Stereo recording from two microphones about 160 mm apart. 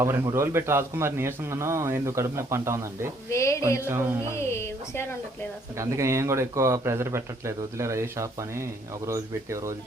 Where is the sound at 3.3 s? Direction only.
20° left (ahead or behind).